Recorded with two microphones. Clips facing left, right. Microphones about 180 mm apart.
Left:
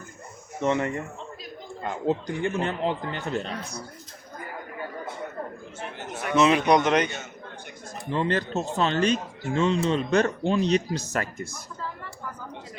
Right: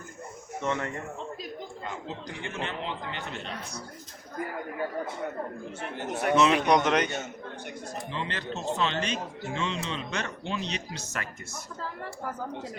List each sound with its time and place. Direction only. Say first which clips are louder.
0.6 s speech: left 6 dB; 20° left (ahead or behind)
1.8 s speech: left 15 dB; 50° left (ahead or behind)
6.3 s a man's voice: left 3 dB; centre (ahead or behind)
8.1 s speech: left 11 dB; 45° left (ahead or behind)